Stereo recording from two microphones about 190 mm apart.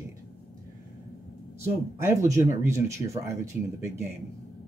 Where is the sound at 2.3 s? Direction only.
15° right (ahead or behind).